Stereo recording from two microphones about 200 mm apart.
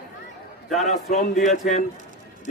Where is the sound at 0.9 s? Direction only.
35° left (ahead or behind).